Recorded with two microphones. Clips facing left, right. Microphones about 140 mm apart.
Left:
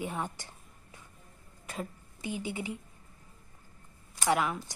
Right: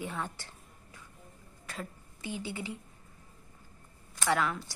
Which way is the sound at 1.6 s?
20° left (ahead or behind).